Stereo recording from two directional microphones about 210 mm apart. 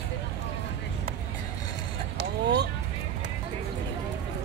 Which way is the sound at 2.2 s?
55° right (ahead or behind).